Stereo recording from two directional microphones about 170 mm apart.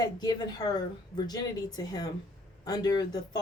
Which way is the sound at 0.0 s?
25° left (ahead or behind).